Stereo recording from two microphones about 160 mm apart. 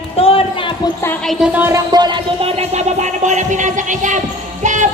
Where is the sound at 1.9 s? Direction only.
25° right (ahead or behind).